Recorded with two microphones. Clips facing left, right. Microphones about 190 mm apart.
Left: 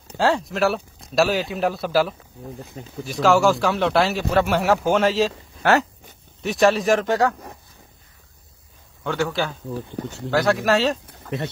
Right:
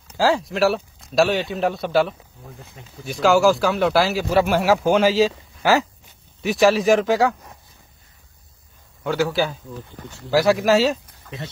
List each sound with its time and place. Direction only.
0.2 s speech: centre (ahead or behind)
2.8 s speech: 35° left (ahead or behind)
3.1 s speech: centre (ahead or behind)
9.0 s speech: 5° right (ahead or behind)